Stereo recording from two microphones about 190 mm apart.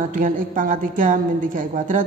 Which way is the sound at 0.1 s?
45° right (ahead or behind).